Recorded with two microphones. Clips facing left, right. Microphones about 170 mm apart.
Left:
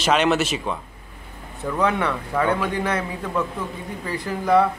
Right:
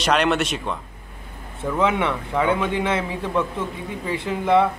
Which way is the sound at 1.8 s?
20° right (ahead or behind).